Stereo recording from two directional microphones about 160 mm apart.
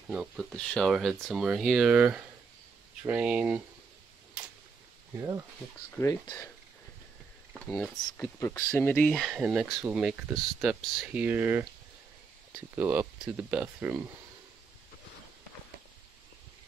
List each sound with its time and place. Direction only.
0.1 s speech: 5° right (ahead or behind)
7.5 s speech: 5° left (ahead or behind)
8.4 s speech: 20° left (ahead or behind); by 14.0 s 10° right (ahead or behind)